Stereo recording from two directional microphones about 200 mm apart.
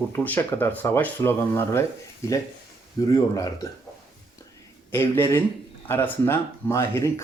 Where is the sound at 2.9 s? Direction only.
20° left (ahead or behind).